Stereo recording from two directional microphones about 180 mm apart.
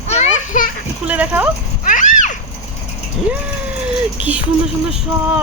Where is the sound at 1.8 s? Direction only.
45° left (ahead or behind).